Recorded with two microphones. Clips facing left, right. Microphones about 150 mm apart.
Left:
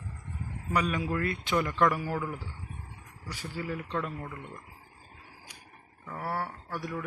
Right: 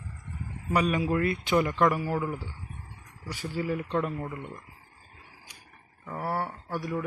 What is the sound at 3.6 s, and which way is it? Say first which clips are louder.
Speech: right 5 dB; 20° right (ahead or behind).